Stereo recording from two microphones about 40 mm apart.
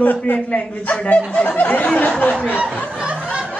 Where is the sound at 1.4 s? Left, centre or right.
Left.